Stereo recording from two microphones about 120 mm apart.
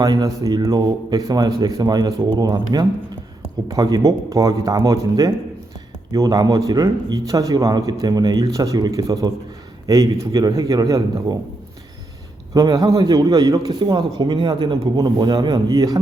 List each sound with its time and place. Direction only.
0.0 s a man's voice: 30° right (ahead or behind)
12.5 s speech: 35° right (ahead or behind)